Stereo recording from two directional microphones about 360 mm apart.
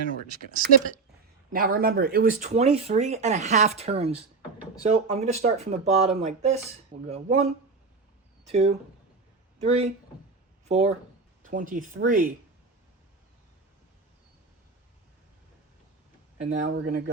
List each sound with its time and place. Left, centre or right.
0.1 s speech: right
8.5 s speech: centre
16.4 s speech: centre
16.6 s speech: right